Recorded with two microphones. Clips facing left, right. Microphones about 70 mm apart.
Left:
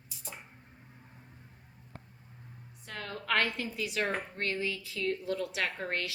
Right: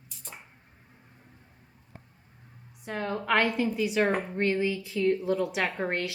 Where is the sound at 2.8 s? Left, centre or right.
Right.